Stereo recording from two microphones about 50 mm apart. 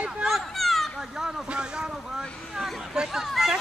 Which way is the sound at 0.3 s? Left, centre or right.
Centre.